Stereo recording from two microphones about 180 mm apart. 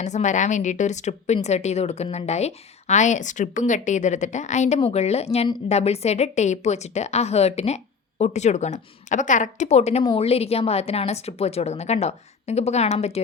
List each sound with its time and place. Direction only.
0.0 s a woman's voice: 40° left (ahead or behind)